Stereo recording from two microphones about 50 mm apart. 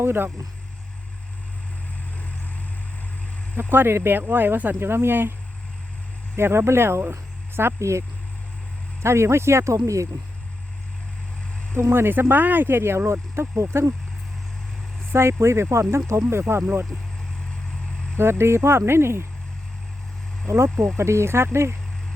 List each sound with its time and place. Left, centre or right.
0.0 s speech: right
3.6 s speech: right
4.8 s speech: right
6.3 s speech: right
7.8 s speech: right
9.0 s speech: right
11.7 s speech: right
13.1 s speech: right
15.1 s speech: right
16.4 s speech: right
18.2 s speech: right
20.5 s speech: right